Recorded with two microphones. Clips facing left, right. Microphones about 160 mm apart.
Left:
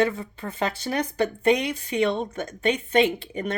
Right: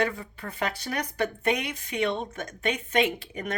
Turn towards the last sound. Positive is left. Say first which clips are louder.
# left 4 dB
turn(degrees=30)  # may be behind; listen again after turning